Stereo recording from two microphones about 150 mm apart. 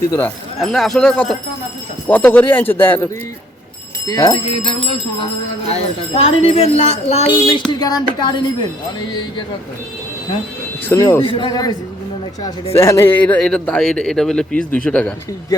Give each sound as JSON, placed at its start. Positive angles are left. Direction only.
{"t": 0.1, "sound": "speech", "side_deg": 10}
{"t": 0.6, "sound": "a man's voice", "side_deg": 0}
{"t": 4.0, "sound": "speech", "side_deg": 25}
{"t": 7.7, "sound": "speech", "side_deg": 25}
{"t": 10.8, "sound": "speech", "side_deg": 20}
{"t": 11.2, "sound": "speech", "side_deg": 35}
{"t": 12.7, "sound": "a man's voice", "side_deg": 15}